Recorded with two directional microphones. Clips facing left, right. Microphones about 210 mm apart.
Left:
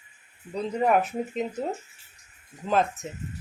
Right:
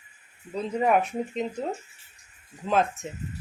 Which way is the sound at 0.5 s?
Centre (ahead or behind).